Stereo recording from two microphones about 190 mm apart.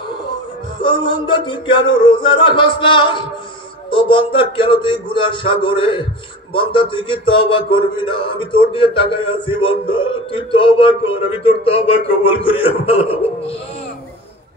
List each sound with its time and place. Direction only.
0.7 s a man's voice: 25° left (ahead or behind)